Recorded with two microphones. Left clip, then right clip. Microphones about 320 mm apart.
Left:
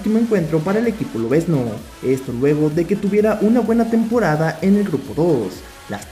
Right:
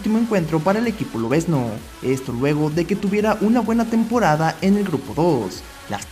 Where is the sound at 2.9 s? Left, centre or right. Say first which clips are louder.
Left 3 dB; right.